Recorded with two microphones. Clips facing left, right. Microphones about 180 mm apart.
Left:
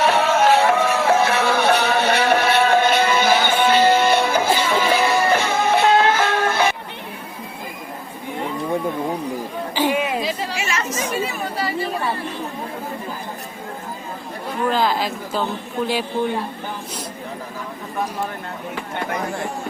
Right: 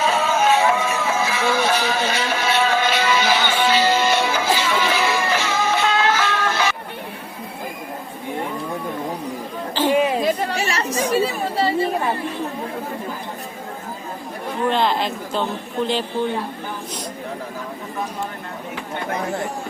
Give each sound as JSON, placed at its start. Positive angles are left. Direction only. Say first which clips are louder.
{"t": 0.1, "sound": "music", "louder": "left 2 dB", "side_deg": 70}
{"t": 4.7, "sound": "music", "louder": "left 2 dB", "side_deg": 35}
{"t": 5.3, "sound": "music", "louder": "left 3 dB", "side_deg": 55}
{"t": 9.9, "sound": "chatter", "louder": "right 4 dB", "side_deg": -40}
{"t": 14.7, "sound": "a sound", "louder": "even", "side_deg": 0}